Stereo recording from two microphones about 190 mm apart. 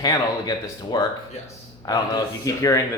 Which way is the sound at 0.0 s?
20° left (ahead or behind).